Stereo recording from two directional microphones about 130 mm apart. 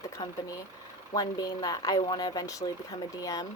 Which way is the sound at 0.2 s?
35° left (ahead or behind).